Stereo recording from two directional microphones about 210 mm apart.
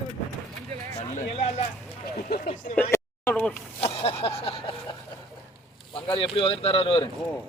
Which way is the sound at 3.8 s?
30° left (ahead or behind).